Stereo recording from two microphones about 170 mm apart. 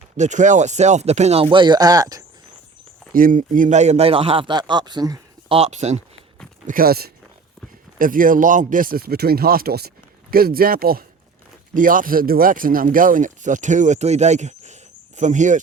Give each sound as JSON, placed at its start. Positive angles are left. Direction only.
{"t": 0.2, "sound": "a man's voice", "side_deg": -45}
{"t": 3.1, "sound": "a man's voice", "side_deg": -55}
{"t": 5.5, "sound": "a man's voice", "side_deg": -40}
{"t": 6.7, "sound": "speech", "side_deg": -60}
{"t": 7.9, "sound": "speech", "side_deg": -55}